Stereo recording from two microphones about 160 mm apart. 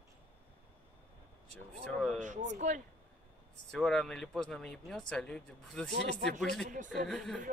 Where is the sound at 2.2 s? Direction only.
50° right (ahead or behind).